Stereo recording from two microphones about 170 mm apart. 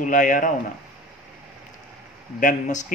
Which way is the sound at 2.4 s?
45° left (ahead or behind).